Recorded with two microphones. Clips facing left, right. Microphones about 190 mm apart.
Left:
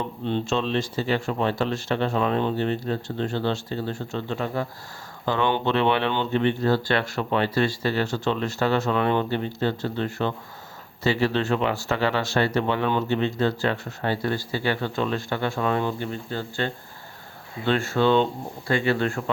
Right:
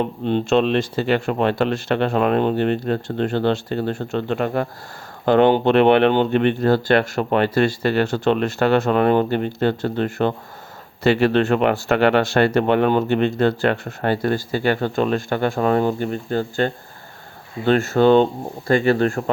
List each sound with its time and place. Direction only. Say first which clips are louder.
0.5 s speech: right 10 dB; 65° right (ahead or behind); by 19.2 s 45° right (ahead or behind)